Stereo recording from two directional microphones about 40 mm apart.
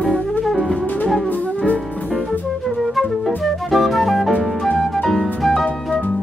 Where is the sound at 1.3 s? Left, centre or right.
Left.